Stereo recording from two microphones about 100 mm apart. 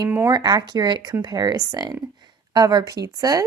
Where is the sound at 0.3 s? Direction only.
45° right (ahead or behind).